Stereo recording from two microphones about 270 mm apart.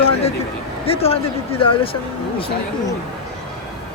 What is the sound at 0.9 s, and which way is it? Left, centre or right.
Speech, left.